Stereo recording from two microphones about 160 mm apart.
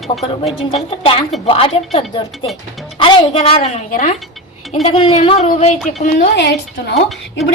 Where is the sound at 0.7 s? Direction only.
35° left (ahead or behind).